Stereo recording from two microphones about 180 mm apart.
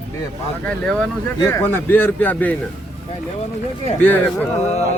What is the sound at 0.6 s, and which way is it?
Speech, 5° left (ahead or behind).